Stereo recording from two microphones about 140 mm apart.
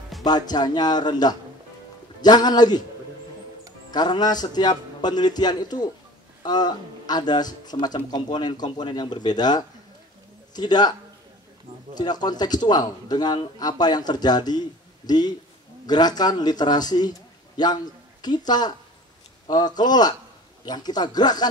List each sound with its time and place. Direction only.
0.2 s a man's voice: 30° left (ahead or behind)
3.9 s a man's voice: 30° left (ahead or behind)
18.2 s a man's voice: 30° left (ahead or behind)